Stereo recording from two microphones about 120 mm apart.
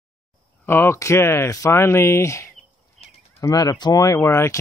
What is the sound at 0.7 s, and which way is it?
Speech, 20° left (ahead or behind).